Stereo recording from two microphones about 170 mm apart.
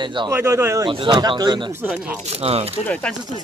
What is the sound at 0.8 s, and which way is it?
Speech, 30° right (ahead or behind).